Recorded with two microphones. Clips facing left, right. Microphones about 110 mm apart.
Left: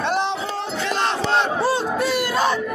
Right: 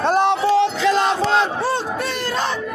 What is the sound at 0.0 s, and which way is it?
Music, 50° right (ahead or behind).